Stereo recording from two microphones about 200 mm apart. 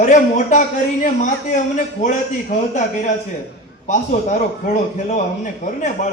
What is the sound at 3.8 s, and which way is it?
Speech, 35° left (ahead or behind).